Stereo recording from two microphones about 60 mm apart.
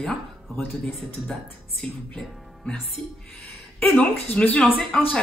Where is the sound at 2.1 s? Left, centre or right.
Centre.